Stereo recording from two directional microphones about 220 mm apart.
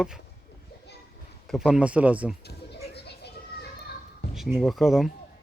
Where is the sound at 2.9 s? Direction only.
50° left (ahead or behind).